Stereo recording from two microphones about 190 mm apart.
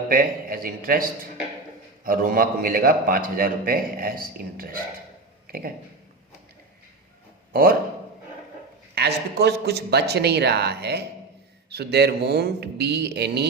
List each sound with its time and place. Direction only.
0.1 s a man's voice: 50° right (ahead or behind)
2.0 s a man's voice: 50° right (ahead or behind)
7.5 s a man's voice: 50° right (ahead or behind)
9.0 s speech: 60° right (ahead or behind)